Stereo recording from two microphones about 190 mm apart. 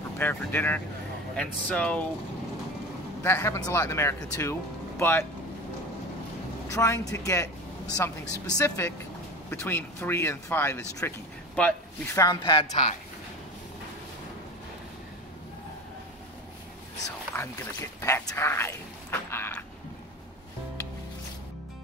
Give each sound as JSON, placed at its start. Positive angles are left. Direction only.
{"t": 0.2, "sound": "speech", "side_deg": 10}
{"t": 3.2, "sound": "speech", "side_deg": 15}
{"t": 6.7, "sound": "speech", "side_deg": 15}
{"t": 12.2, "sound": "a woman's voice", "side_deg": 20}
{"t": 17.4, "sound": "a sound", "side_deg": 15}